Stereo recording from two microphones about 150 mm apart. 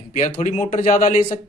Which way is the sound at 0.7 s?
65° left (ahead or behind).